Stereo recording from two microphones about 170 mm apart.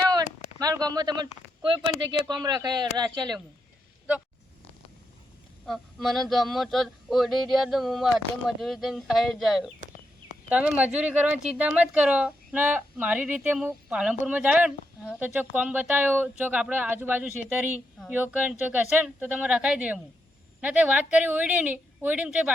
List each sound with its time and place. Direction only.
0.6 s speech: 20° right (ahead or behind)
5.6 s a sound: centre (ahead or behind)
10.5 s speech: 10° right (ahead or behind)